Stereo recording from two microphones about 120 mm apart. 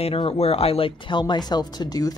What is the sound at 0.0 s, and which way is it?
Speech, 50° left (ahead or behind).